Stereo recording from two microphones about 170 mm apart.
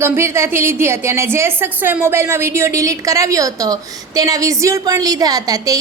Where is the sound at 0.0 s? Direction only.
15° right (ahead or behind).